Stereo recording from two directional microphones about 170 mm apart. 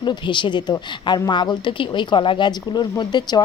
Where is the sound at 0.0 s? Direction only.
25° left (ahead or behind).